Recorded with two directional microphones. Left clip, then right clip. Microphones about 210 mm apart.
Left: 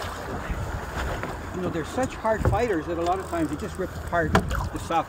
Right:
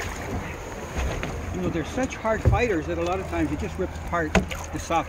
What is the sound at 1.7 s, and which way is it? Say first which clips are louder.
Speech: left 1 dB; 35° left (ahead or behind).